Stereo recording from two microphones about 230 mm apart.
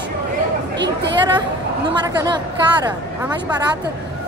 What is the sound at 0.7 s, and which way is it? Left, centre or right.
Speech, right.